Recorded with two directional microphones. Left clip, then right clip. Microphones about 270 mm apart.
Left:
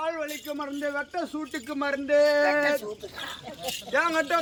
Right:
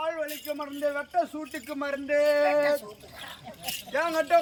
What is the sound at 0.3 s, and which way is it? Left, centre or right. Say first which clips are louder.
Speech: left 1 dB; centre.